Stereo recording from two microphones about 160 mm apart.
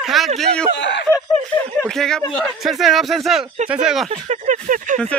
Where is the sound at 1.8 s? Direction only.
5° left (ahead or behind).